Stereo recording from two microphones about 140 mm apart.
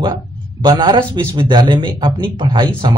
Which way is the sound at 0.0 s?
35° right (ahead or behind).